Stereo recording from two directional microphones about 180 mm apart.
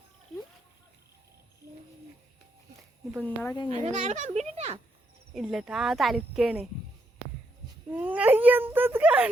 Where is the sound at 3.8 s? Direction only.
40° right (ahead or behind).